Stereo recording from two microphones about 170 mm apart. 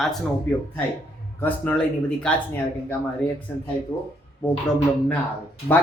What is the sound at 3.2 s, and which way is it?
Speech, 5° left (ahead or behind).